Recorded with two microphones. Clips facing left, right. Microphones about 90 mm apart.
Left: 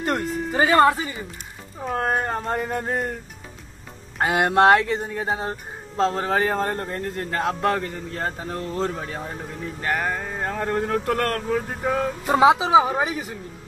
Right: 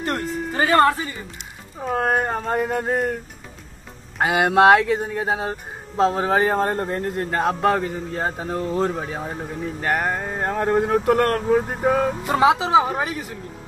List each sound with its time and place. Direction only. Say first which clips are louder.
0.0 s speech: left 1 dB; 20° left (ahead or behind)
0.7 s speech: even; 10° left (ahead or behind)
1.8 s speech: right 3 dB; 5° right (ahead or behind)
4.2 s speech: right 2 dB; 5° right (ahead or behind)
12.4 s speech: left 1 dB; 5° left (ahead or behind)